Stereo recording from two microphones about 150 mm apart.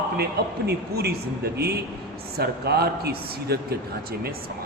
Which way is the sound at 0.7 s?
90° right.